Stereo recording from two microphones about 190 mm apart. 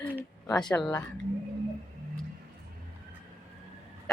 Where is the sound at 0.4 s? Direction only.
20° left (ahead or behind).